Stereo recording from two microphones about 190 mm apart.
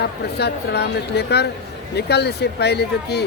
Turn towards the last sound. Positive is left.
turn(degrees=60)  # may be behind; listen again after turning